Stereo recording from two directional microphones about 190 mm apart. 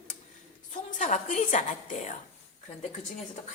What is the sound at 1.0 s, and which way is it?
A woman's voice, 40° left (ahead or behind).